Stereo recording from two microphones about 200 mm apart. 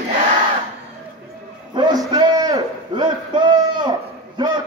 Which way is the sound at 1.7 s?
20° right (ahead or behind).